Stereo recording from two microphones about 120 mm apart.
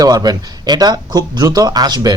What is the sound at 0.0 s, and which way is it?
Speech, 35° right (ahead or behind).